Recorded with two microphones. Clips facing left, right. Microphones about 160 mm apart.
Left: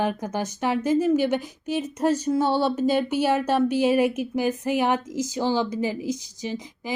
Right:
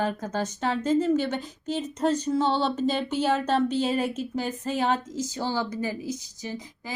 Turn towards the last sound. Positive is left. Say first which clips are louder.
# left 5 dB
turn(degrees=20)  # may be behind; listen again after turning